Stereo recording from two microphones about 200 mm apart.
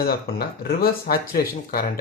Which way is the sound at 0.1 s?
50° left (ahead or behind).